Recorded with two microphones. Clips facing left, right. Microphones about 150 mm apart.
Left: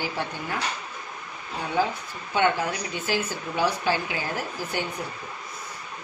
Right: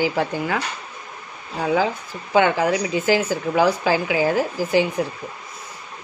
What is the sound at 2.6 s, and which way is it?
A woman's voice, 90° right.